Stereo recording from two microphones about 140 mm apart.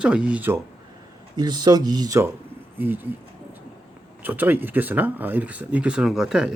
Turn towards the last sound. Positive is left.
turn(degrees=-5)  # may be behind; listen again after turning